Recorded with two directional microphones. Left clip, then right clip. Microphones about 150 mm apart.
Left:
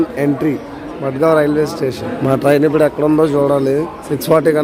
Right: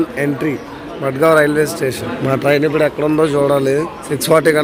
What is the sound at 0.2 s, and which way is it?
Speech, 25° left (ahead or behind).